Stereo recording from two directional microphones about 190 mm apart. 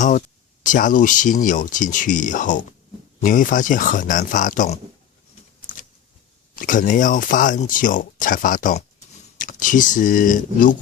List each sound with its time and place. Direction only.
0.6 s speech: 45° left (ahead or behind)
6.6 s speech: 45° left (ahead or behind)